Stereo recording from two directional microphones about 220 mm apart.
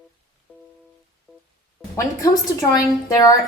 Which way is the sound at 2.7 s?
15° left (ahead or behind).